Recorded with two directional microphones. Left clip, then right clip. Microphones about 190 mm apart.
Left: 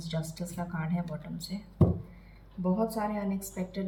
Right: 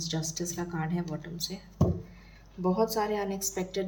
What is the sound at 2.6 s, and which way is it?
A woman's voice, 55° right (ahead or behind).